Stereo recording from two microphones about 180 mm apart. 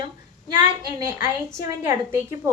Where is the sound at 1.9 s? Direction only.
15° right (ahead or behind).